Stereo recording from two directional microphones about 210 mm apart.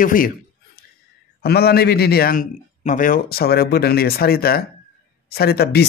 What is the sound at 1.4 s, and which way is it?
Speech, 50° left (ahead or behind).